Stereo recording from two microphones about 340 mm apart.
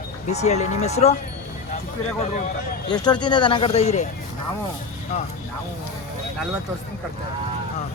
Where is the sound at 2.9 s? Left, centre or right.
Centre.